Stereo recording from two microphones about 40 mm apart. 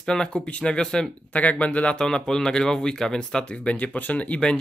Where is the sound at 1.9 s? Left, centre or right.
Centre.